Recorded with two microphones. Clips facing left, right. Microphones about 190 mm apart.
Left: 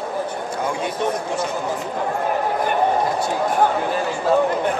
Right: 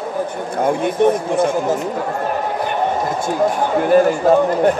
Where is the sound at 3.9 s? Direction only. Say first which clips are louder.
Right 10 dB; 50° right (ahead or behind).